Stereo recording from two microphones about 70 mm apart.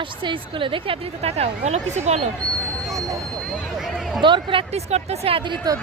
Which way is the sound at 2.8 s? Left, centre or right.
Right.